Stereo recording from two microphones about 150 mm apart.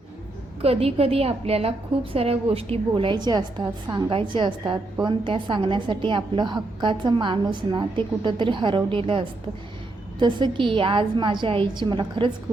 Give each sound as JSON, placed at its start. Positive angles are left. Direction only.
{"t": 0.6, "sound": "a woman's voice", "side_deg": -40}